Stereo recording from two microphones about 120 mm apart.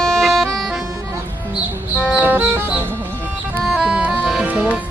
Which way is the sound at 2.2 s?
15° right (ahead or behind).